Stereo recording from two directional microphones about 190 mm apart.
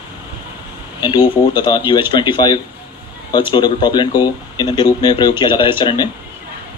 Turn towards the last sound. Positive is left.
turn(degrees=25)  # may be behind; listen again after turning